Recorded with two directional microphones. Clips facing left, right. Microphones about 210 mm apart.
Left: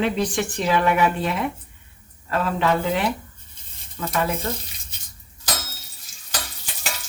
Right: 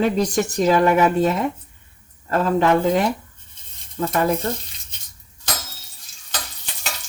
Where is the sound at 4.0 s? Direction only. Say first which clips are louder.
Right 6 dB; 35° right (ahead or behind).